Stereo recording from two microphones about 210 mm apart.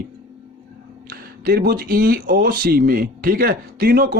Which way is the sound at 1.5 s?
45° right (ahead or behind).